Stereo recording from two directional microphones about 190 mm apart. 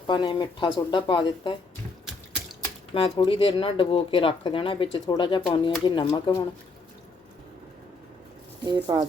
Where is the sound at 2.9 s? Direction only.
30° left (ahead or behind).